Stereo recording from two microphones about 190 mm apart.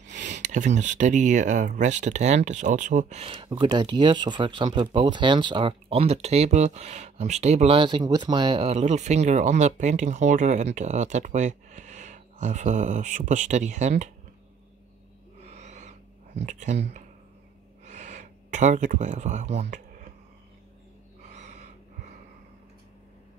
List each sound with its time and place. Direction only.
0.0 s speech: 40° right (ahead or behind)
15.4 s owl: 35° right (ahead or behind)
16.3 s speech: 40° right (ahead or behind)
17.8 s speech: 40° right (ahead or behind)
21.3 s gasp: 40° right (ahead or behind)